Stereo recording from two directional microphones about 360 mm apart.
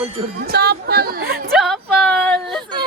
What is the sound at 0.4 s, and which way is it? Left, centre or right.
A woman's voice, right.